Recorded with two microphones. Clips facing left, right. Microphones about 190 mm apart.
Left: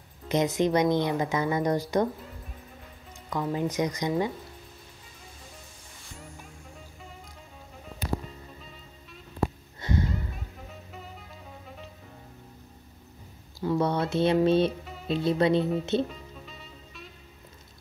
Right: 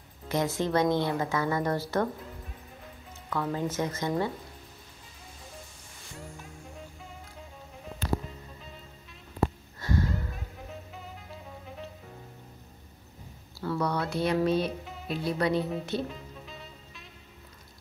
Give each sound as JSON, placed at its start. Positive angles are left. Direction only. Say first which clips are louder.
{"t": 0.3, "sound": "speech", "louder": "left 3 dB", "side_deg": 20}
{"t": 3.3, "sound": "speech", "louder": "left 2 dB", "side_deg": 15}
{"t": 9.8, "sound": "a sound", "louder": "left 1 dB", "side_deg": 20}
{"t": 13.6, "sound": "a sound", "louder": "left 4 dB", "side_deg": 20}
{"t": 15.0, "sound": "speech", "louder": "left 5 dB", "side_deg": 25}
{"t": 16.1, "sound": "music", "louder": "right 1 dB", "side_deg": 0}